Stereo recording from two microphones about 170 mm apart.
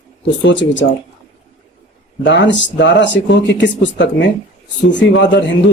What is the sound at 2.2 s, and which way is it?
A man's voice, 90° left.